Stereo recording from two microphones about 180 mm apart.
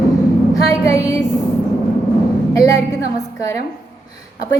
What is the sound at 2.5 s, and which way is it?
Speech, 20° left (ahead or behind).